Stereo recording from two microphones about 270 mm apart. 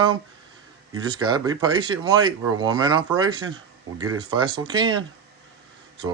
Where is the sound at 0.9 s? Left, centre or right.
Centre.